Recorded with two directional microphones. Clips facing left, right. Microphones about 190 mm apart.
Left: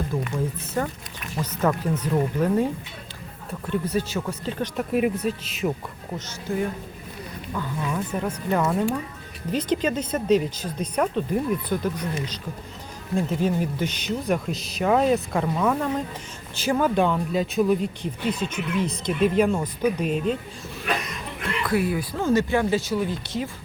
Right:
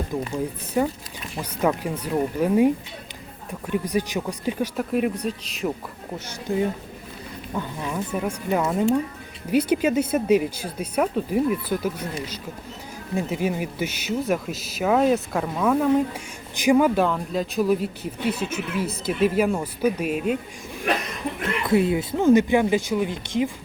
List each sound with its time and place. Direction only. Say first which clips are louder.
0.3 s speech: right 5 dB; 15° right (ahead or behind); by 5.7 s centre (ahead or behind)
6.1 s speech: right 2 dB; 15° right (ahead or behind)
7.9 s speech: right 1 dB; 10° right (ahead or behind)
13.1 s speech: left 1 dB; 10° right (ahead or behind)
21.6 s speech: right 3 dB; 25° right (ahead or behind)